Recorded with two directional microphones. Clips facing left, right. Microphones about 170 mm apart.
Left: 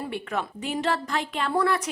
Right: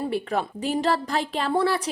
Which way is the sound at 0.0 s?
35° right (ahead or behind).